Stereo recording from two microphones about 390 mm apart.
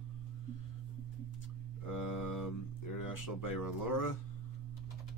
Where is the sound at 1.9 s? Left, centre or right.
Left.